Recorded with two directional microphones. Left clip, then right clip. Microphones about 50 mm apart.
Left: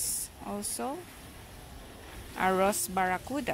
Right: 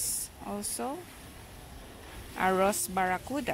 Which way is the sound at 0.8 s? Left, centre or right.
Centre.